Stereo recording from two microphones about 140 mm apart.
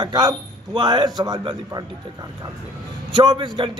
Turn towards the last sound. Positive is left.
turn(degrees=-35)  # may be behind; listen again after turning